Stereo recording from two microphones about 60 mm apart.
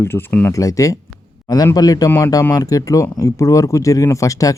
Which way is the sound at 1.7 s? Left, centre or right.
Left.